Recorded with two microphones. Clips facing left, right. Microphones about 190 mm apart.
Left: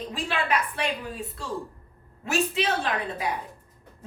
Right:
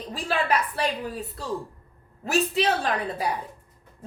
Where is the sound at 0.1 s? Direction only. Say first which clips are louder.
Right 3 dB; 35° right (ahead or behind).